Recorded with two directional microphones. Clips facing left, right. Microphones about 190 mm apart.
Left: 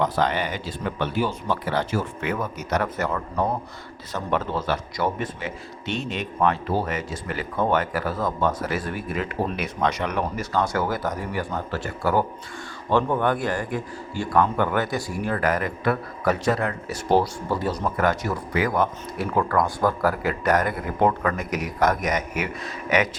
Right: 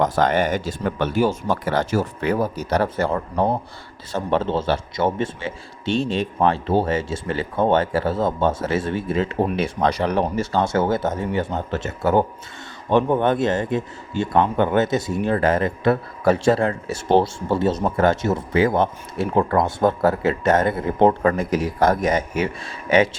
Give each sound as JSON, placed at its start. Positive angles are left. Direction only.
{"t": 0.0, "sound": "a man's voice", "side_deg": -45}